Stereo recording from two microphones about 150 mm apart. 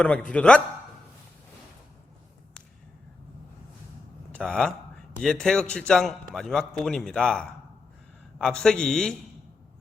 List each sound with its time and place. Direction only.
0.0 s a man's voice: 5° left (ahead or behind)
4.3 s a man's voice: 5° left (ahead or behind)